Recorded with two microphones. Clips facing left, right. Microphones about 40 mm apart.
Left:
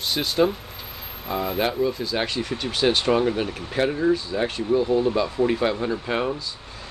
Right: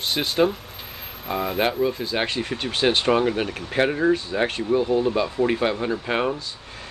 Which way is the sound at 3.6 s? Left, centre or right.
Right.